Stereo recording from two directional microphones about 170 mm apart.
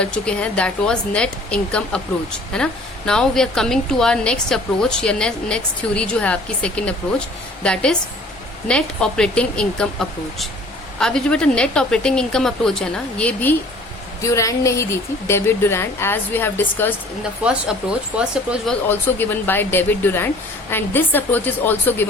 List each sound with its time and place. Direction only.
0.0 s speech: 5° left (ahead or behind)
18.2 s speech: centre (ahead or behind)